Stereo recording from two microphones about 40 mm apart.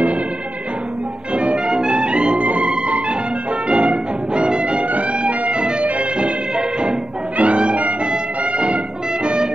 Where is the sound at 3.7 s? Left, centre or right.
Right.